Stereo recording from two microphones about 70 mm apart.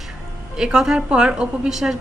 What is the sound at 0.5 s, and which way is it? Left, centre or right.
A woman's voice, centre.